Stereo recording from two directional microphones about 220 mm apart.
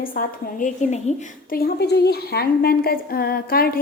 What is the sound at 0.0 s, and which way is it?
A woman's voice, 40° left (ahead or behind).